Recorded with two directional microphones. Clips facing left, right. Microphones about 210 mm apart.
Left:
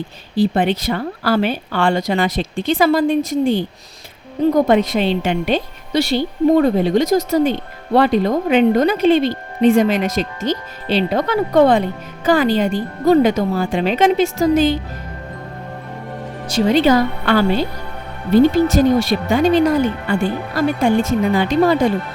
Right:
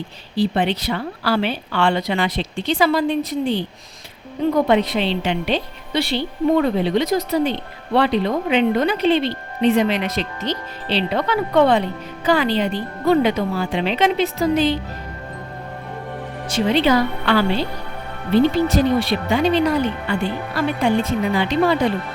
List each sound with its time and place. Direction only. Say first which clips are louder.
0.3 s speech: left 3 dB; 50° left (ahead or behind)
16.5 s speech: left 3 dB; 40° left (ahead or behind)